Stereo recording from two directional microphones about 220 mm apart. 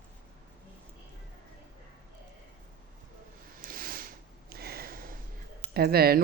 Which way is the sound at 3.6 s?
40° right (ahead or behind).